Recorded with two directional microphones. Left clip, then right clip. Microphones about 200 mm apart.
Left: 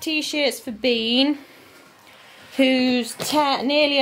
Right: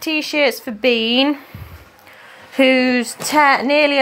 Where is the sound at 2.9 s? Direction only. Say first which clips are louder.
Right 4 dB; 35° right (ahead or behind).